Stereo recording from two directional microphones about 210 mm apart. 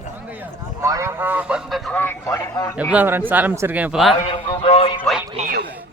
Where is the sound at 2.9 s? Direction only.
10° right (ahead or behind).